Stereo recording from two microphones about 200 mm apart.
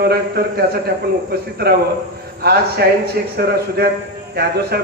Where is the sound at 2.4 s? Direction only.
50° right (ahead or behind).